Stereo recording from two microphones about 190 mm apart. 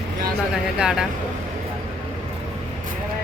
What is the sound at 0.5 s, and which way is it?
Speech, 5° right (ahead or behind).